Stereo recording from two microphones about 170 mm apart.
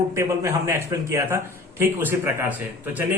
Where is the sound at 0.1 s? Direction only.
20° right (ahead or behind).